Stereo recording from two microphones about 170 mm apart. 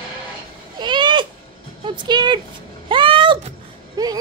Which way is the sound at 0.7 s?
25° right (ahead or behind).